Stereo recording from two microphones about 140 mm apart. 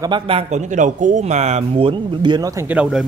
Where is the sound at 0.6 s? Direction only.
60° right (ahead or behind); by 2.6 s 25° right (ahead or behind).